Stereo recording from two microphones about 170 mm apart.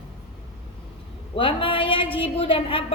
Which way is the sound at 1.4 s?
30° left (ahead or behind).